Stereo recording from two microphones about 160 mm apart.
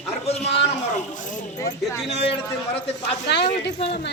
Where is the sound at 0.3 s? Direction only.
35° left (ahead or behind).